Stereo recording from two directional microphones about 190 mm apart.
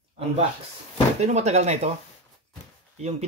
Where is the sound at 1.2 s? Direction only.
35° right (ahead or behind).